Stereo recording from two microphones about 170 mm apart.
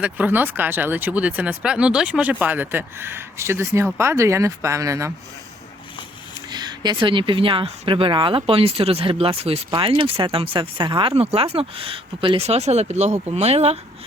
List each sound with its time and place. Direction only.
0.0 s speech: 10° right (ahead or behind)
6.3 s speech: 25° right (ahead or behind)